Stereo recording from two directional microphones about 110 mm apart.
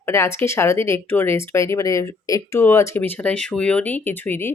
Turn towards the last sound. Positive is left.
turn(degrees=20)  # may be behind; listen again after turning